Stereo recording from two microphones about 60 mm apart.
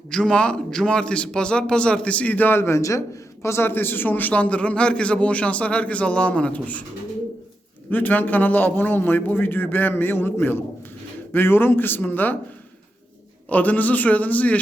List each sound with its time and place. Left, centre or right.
0.1 s a man's voice: centre; by 2.6 s left
2.6 s a man's voice: left
3.4 s a man's voice: left
7.9 s a man's voice: left
13.5 s a man's voice: left